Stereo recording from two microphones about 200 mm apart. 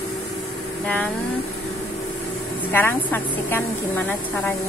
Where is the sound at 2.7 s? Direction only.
10° left (ahead or behind).